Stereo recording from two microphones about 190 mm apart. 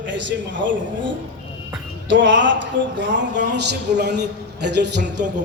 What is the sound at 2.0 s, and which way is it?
A man's voice, 75° right (ahead or behind).